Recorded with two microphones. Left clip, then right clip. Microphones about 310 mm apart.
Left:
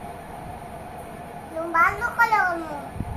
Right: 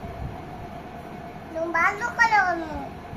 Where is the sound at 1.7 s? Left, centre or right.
Centre.